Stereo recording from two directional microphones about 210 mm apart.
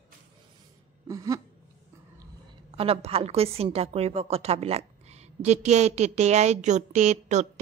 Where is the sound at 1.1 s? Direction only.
15° right (ahead or behind).